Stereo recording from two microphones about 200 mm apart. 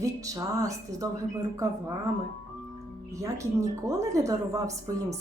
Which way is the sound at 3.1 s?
15° right (ahead or behind).